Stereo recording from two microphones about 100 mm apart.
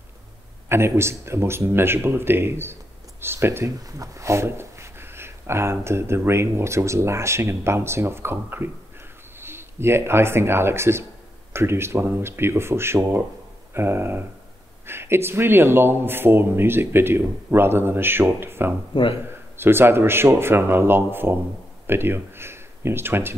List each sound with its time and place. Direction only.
0.7 s speech: 25° right (ahead or behind)